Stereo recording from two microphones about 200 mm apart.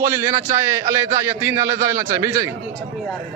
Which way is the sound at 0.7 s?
15° right (ahead or behind).